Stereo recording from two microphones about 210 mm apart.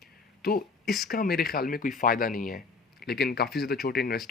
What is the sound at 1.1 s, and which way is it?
Speech, 45° left (ahead or behind).